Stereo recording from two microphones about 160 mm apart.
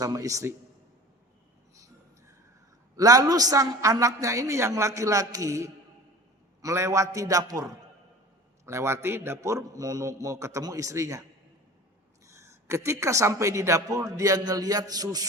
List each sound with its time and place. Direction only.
0.0 s a woman's voice: 20° right (ahead or behind)
1.7 s a sound: 20° right (ahead or behind)
2.9 s a woman's voice: 20° right (ahead or behind)
12.2 s a woman's voice: 15° right (ahead or behind)